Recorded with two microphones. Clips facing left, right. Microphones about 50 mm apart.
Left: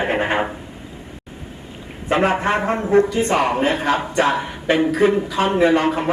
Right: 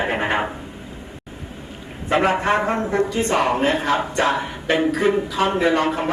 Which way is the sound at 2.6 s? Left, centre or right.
Centre.